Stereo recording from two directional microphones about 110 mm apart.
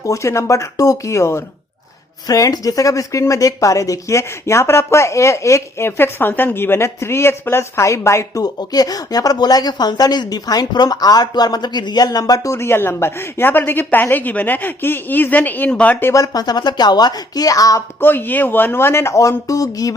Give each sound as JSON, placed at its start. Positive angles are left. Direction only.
{"t": 0.0, "sound": "speech", "side_deg": 30}
{"t": 16.1, "sound": "speech", "side_deg": 35}
{"t": 18.0, "sound": "speech", "side_deg": 15}